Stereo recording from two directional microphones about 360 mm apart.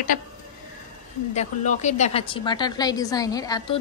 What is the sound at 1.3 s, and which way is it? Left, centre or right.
A woman's voice, centre.